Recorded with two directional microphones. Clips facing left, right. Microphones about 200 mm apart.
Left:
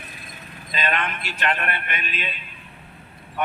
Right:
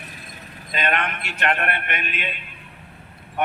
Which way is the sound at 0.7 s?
55° right (ahead or behind).